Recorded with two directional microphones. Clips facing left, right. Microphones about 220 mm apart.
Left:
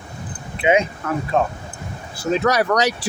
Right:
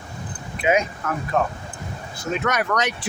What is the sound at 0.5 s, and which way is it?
Speech, 30° left (ahead or behind).